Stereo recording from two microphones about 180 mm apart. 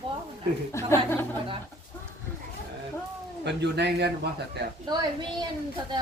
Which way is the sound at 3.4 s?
70° right (ahead or behind).